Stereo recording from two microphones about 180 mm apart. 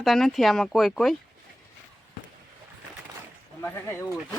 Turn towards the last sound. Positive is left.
turn(degrees=10)  # may be behind; listen again after turning